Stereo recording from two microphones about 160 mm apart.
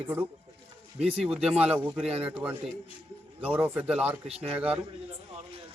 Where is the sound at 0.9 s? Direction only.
40° right (ahead or behind).